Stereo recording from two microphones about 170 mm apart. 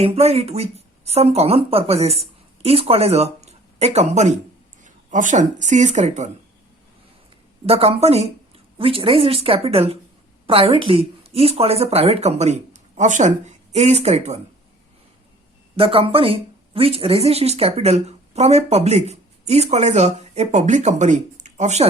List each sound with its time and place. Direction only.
0.0 s speech: 35° right (ahead or behind)
7.7 s speech: 35° right (ahead or behind)
15.7 s speech: 35° right (ahead or behind)